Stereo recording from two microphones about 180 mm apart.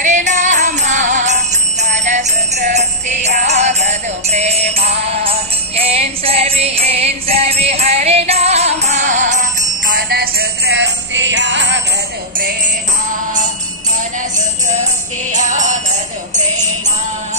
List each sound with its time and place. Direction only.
0.0 s jingle bell: 40° right (ahead or behind)
9.8 s music: 55° right (ahead or behind); by 11.8 s 85° right
15.3 s music: 45° right (ahead or behind)